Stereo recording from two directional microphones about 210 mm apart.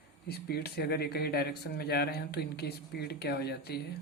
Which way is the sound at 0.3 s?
50° left (ahead or behind).